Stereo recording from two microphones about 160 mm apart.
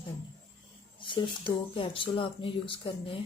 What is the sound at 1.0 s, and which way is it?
Speech, 30° left (ahead or behind).